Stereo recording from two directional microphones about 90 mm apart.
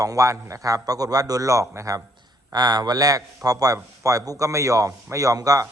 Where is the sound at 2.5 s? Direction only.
50° right (ahead or behind).